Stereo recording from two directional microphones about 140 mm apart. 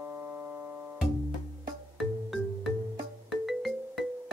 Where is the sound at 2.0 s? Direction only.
Centre (ahead or behind).